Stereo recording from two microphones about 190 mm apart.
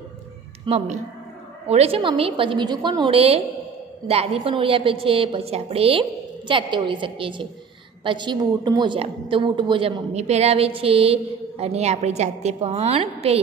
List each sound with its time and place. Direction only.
0.7 s a woman's voice: 35° right (ahead or behind)